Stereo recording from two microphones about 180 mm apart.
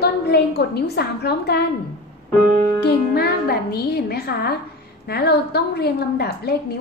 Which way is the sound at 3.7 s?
60° left (ahead or behind).